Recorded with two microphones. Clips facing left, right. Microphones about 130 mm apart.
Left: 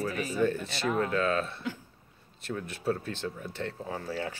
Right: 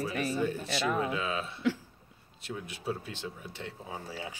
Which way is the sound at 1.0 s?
10° right (ahead or behind).